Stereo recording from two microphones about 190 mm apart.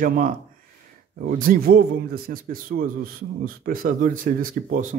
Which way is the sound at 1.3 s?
45° right (ahead or behind).